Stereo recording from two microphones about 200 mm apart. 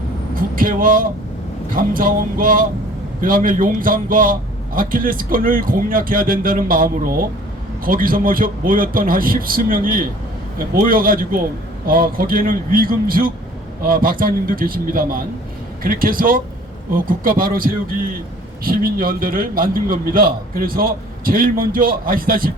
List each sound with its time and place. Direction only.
0.5 s a man's voice: 45° right (ahead or behind)